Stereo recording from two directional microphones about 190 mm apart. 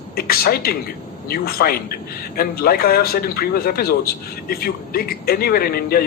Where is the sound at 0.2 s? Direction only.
50° left (ahead or behind).